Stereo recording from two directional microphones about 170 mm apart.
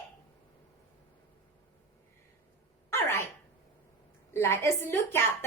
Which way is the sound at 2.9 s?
15° left (ahead or behind).